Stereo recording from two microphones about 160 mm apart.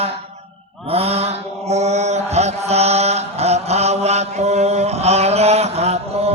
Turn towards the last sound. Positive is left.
turn(degrees=-40)  # may be behind; listen again after turning